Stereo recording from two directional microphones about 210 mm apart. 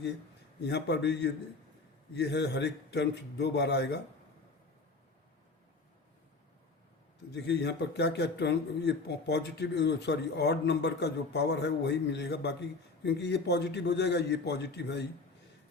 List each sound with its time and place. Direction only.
0.6 s speech: 55° left (ahead or behind)
7.3 s speech: 55° left (ahead or behind)